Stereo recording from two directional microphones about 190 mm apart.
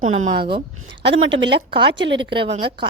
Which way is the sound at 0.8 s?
75° right (ahead or behind).